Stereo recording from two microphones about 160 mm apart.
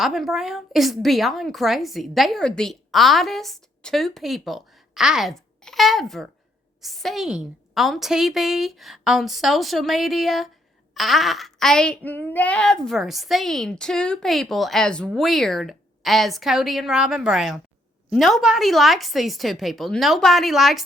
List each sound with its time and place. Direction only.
0.0 s speech: centre (ahead or behind)